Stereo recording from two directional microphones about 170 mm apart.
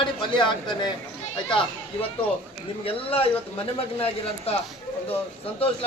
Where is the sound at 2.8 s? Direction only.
35° left (ahead or behind).